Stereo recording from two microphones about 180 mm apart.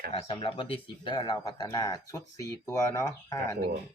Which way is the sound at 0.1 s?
30° left (ahead or behind).